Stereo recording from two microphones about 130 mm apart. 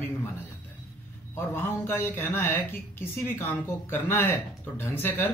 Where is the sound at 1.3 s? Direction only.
15° left (ahead or behind).